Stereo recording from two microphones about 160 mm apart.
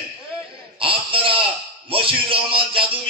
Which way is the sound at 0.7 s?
35° right (ahead or behind).